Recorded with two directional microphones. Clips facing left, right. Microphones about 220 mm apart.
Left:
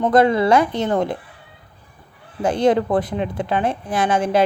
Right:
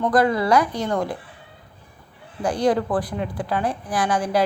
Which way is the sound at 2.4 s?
25° left (ahead or behind).